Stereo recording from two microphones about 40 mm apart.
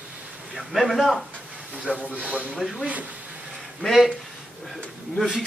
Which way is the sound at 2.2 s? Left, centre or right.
Right.